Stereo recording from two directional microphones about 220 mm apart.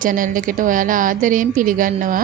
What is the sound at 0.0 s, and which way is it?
A woman's voice, 40° right (ahead or behind).